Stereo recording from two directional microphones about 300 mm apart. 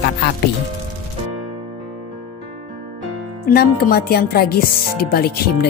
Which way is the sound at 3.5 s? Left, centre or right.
Left.